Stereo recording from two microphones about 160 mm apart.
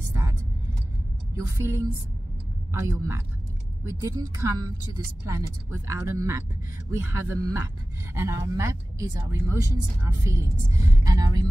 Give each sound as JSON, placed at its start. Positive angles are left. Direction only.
{"t": 1.3, "sound": "speech", "side_deg": -15}